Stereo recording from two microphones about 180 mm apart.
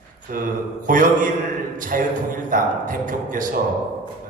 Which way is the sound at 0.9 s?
50° right (ahead or behind).